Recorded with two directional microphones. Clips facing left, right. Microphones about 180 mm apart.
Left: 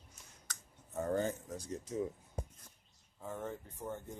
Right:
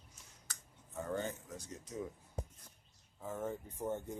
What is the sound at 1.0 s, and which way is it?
Speech, 40° left (ahead or behind).